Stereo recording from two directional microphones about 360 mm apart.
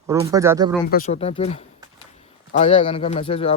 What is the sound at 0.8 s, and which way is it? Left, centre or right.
Speech, centre.